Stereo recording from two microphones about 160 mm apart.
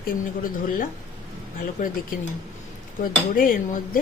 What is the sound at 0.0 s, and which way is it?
Speech, 60° left (ahead or behind).